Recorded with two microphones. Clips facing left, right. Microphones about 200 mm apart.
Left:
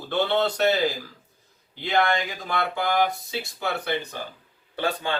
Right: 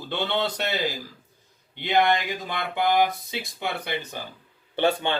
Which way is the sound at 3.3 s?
15° right (ahead or behind).